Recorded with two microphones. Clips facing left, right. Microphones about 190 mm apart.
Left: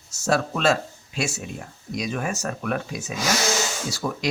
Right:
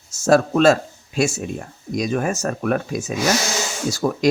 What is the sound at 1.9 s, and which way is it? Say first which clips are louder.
Speech: right 6 dB; 45° right (ahead or behind).